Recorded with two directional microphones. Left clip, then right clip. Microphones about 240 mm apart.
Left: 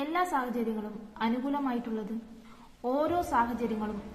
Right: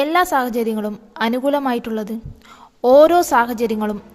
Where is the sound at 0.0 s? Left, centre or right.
Right.